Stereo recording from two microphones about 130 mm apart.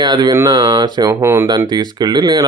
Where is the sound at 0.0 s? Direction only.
35° right (ahead or behind).